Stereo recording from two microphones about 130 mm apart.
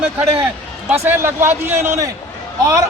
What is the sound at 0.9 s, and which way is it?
A man's voice, 15° right (ahead or behind).